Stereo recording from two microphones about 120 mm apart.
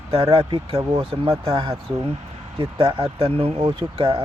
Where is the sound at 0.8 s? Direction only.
30° right (ahead or behind).